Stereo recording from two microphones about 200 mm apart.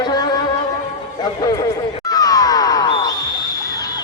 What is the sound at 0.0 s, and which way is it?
Music, 20° left (ahead or behind).